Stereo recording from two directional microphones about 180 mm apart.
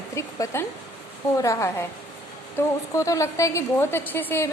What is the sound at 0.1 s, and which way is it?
A woman's voice, 15° left (ahead or behind).